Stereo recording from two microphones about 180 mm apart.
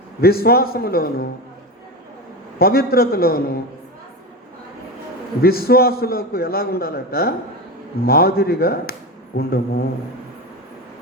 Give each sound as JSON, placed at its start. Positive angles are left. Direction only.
{"t": 0.2, "sound": "a man's voice", "side_deg": 55}
{"t": 2.6, "sound": "a man's voice", "side_deg": 55}
{"t": 5.4, "sound": "a man's voice", "side_deg": 55}